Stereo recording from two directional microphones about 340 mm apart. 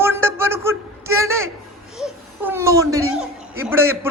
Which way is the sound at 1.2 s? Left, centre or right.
Right.